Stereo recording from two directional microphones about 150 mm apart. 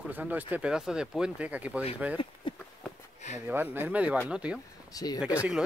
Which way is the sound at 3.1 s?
50° left (ahead or behind).